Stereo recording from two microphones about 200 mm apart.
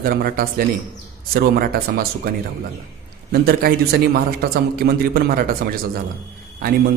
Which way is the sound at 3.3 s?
50° right (ahead or behind).